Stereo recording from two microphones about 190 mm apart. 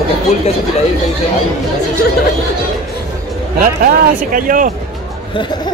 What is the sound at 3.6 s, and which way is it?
Speech, 45° right (ahead or behind).